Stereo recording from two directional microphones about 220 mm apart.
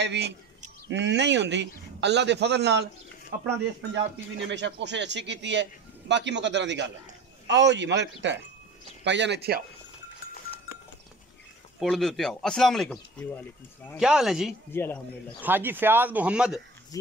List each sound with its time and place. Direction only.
0.0 s a man's voice: 50° right (ahead or behind)
4.5 s a man's voice: 55° right (ahead or behind)
11.8 s speech: centre (ahead or behind)
14.7 s speech: 10° left (ahead or behind)
15.4 s speech: 10° right (ahead or behind)
16.9 s speech: 15° left (ahead or behind)